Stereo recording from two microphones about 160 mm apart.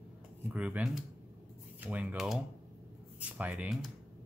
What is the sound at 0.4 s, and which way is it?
Speech, 10° right (ahead or behind).